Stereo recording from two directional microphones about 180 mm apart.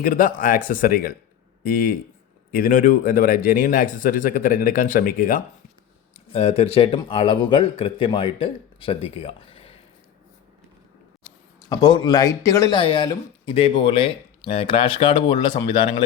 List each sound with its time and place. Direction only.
0.0 s speech: 50° left (ahead or behind)
6.3 s a man's voice: 35° left (ahead or behind)
11.7 s speech: 25° left (ahead or behind)